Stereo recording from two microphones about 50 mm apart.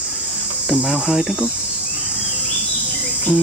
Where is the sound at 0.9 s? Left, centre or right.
Centre.